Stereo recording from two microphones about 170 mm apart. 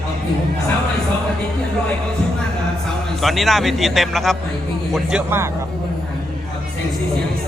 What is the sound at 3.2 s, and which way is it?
Speech, centre (ahead or behind).